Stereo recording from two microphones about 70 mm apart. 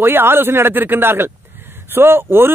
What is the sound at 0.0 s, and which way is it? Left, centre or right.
A man's voice, right.